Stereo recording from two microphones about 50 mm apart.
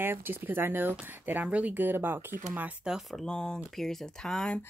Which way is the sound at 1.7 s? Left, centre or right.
Right.